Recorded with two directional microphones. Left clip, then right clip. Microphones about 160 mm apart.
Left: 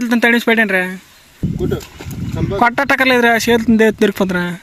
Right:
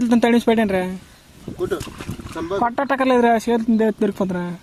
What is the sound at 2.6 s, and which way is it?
Speech, 35° left (ahead or behind).